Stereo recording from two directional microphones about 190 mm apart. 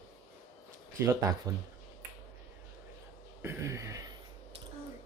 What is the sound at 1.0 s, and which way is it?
Speech, 15° right (ahead or behind).